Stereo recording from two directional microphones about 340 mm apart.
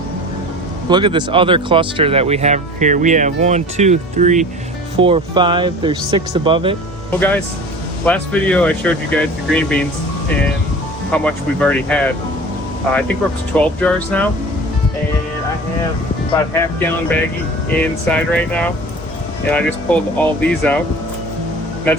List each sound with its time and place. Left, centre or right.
0.9 s speech: centre
8.0 s speech: centre
11.1 s speech: centre
13.6 s speech: centre
16.6 s speech: centre